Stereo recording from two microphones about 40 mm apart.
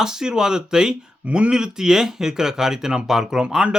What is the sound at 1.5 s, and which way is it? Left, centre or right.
Speech, centre.